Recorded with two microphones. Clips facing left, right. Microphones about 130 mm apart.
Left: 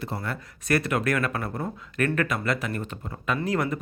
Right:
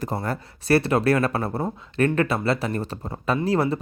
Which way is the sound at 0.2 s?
30° right (ahead or behind).